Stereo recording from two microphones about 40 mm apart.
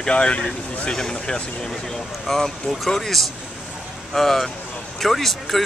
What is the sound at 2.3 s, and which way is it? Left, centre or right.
Speech, centre.